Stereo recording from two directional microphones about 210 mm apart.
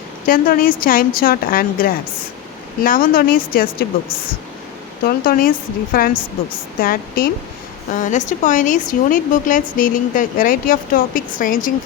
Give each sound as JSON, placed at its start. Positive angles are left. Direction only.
{"t": 0.3, "sound": "a woman's voice", "side_deg": 40}
{"t": 5.0, "sound": "a woman's voice", "side_deg": 45}